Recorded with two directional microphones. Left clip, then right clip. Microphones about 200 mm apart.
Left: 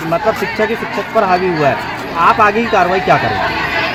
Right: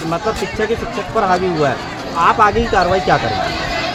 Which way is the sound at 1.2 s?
35° left (ahead or behind).